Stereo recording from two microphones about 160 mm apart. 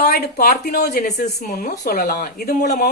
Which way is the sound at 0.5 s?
55° left (ahead or behind).